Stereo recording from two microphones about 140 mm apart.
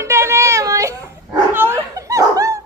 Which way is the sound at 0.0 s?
20° right (ahead or behind).